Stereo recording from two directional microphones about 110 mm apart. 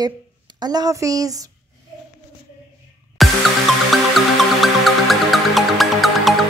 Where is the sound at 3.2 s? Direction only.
Centre (ahead or behind).